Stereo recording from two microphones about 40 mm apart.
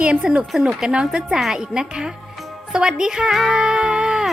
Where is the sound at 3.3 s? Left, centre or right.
Centre.